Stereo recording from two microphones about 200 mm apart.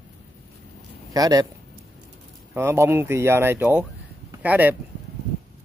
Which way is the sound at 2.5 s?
15° right (ahead or behind).